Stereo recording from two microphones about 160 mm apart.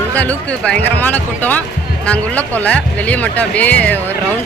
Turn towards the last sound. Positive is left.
turn(degrees=10)  # may be behind; listen again after turning